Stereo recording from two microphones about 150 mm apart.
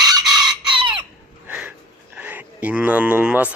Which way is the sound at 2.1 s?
10° right (ahead or behind).